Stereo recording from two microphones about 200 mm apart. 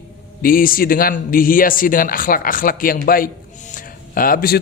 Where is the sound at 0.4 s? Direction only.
45° left (ahead or behind).